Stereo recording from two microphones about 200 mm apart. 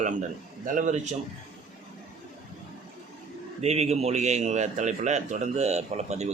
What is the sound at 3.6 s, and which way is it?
A man's voice, 30° right (ahead or behind).